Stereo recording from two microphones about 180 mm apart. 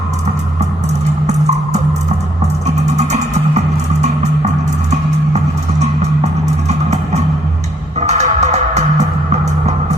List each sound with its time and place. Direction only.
1.3 s music: 40° right (ahead or behind)
6.7 s music: 40° right (ahead or behind)